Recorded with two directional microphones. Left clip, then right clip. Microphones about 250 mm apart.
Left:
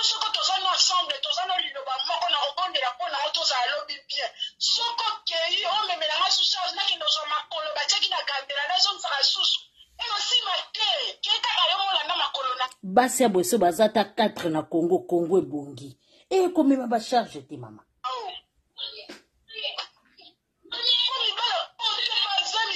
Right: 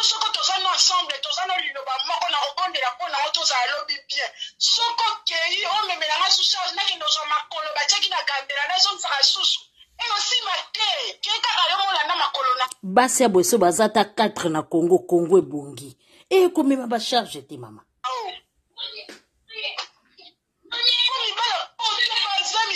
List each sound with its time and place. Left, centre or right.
0.0 s speech: centre
18.0 s wail: centre
19.5 s a sound: centre
20.7 s wail: centre